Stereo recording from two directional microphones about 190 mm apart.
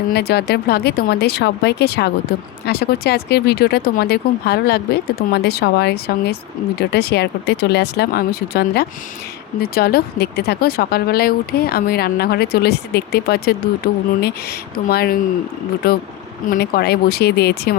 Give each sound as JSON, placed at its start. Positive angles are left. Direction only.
{"t": 0.1, "sound": "speech", "side_deg": 60}